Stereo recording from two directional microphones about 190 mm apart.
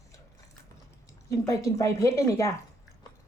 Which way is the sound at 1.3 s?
15° left (ahead or behind).